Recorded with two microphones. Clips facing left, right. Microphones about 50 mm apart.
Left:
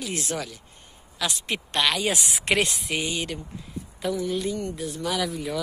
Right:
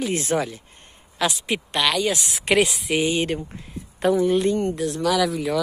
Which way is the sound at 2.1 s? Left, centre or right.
Left.